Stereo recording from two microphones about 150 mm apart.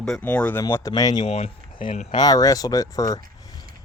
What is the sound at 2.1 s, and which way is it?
Speech, 25° left (ahead or behind).